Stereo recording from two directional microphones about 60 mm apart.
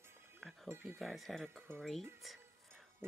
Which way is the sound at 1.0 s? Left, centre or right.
Centre.